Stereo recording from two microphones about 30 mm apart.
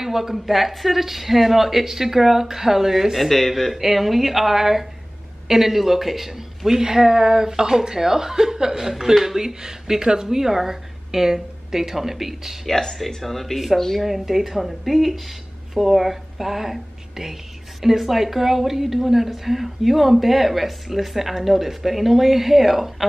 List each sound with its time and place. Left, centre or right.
0.0 s a woman's voice: centre
3.3 s speech: centre
3.7 s a woman's voice: centre
12.6 s a woman's voice: centre
14.0 s a woman's voice: centre